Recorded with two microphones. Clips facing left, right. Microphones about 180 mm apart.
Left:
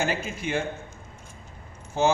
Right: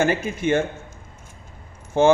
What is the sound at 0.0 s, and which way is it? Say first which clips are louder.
Speech: right 7 dB; 50° right (ahead or behind).